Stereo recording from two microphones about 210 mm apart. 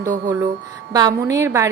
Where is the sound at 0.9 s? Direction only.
15° right (ahead or behind).